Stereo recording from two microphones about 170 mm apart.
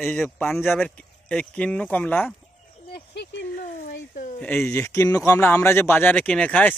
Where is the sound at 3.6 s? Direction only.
50° left (ahead or behind).